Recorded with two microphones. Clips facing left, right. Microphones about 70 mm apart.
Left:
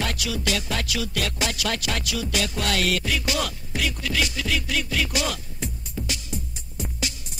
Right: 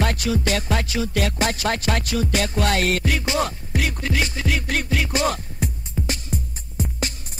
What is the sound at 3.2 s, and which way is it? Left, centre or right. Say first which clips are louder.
Music: right 4 dB; right.